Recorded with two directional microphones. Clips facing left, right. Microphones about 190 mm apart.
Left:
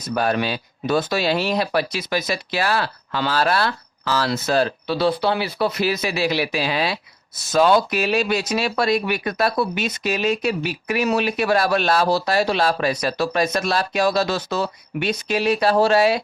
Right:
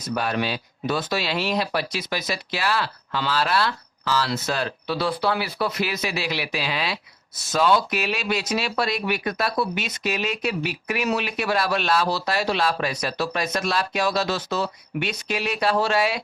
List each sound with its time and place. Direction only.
0.1 s speech: 45° left (ahead or behind)